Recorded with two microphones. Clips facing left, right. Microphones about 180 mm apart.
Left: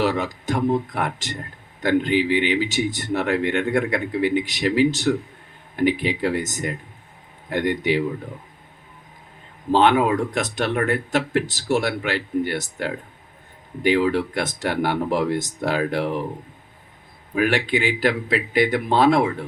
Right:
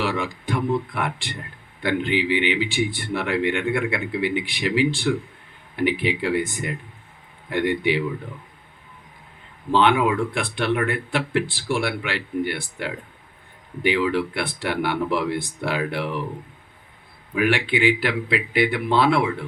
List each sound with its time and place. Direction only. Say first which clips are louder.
0.0 s speech: left 3 dB; 40° left (ahead or behind)
9.7 s speech: left 2 dB; 40° left (ahead or behind)
17.3 s speech: left 1 dB; 40° left (ahead or behind)